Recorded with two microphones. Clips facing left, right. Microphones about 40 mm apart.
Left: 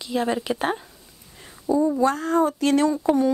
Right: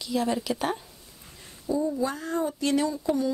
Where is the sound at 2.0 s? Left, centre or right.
Left.